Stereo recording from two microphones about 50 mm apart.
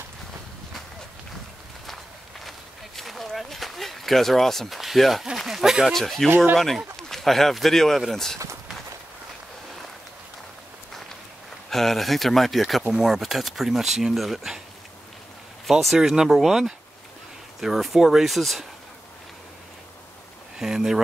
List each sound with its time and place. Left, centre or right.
3.0 s a sound: centre
5.4 s speech: centre
5.9 s speech: centre
11.7 s speech: centre
15.6 s speech: centre
20.5 s speech: centre